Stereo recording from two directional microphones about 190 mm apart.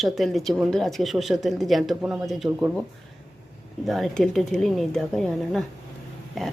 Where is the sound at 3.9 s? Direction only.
Centre (ahead or behind).